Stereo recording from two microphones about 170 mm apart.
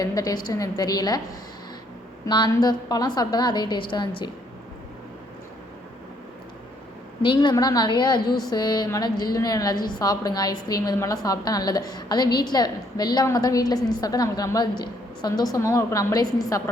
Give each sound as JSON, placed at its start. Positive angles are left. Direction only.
{"t": 0.0, "sound": "a woman's voice", "side_deg": 20}
{"t": 2.2, "sound": "a woman's voice", "side_deg": 25}
{"t": 7.2, "sound": "a woman's voice", "side_deg": 30}